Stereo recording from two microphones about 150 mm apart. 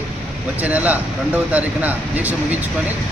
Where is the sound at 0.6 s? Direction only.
10° right (ahead or behind).